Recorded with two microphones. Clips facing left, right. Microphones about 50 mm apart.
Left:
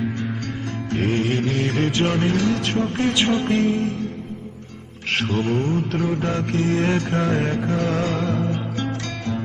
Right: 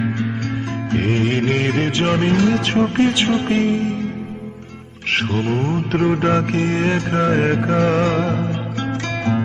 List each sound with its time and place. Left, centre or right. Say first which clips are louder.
0.9 s mantra: right 2 dB; right
5.1 s mantra: right 2 dB; right